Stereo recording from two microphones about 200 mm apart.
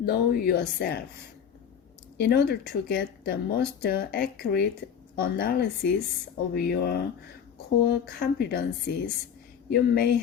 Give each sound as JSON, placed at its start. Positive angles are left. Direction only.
{"t": 0.0, "sound": "speech", "side_deg": 50}
{"t": 2.1, "sound": "speech", "side_deg": 55}